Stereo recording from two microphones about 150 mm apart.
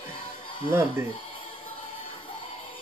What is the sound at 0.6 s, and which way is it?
Speech, 15° right (ahead or behind).